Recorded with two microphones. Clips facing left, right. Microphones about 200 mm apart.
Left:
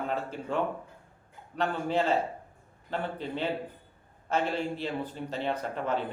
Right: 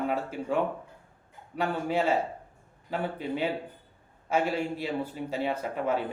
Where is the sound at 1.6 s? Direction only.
10° right (ahead or behind).